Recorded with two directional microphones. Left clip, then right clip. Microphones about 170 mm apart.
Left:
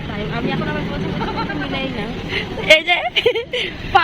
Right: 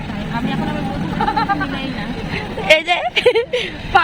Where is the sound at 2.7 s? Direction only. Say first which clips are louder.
Left 1 dB; 15° right (ahead or behind).